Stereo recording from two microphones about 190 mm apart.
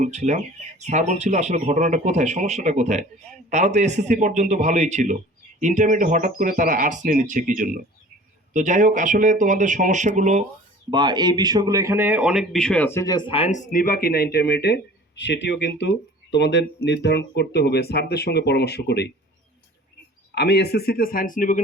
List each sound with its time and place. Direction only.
0.0 s speech: 40° right (ahead or behind)
10.9 s speech: 20° right (ahead or behind); by 19.0 s 60° left (ahead or behind)
20.3 s speech: 60° left (ahead or behind); by 21.6 s 45° left (ahead or behind)